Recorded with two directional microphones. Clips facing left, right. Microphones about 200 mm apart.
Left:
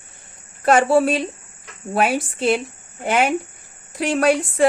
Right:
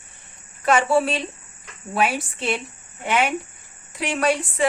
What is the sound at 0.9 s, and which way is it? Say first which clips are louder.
Speech: left 4 dB; 45° left (ahead or behind).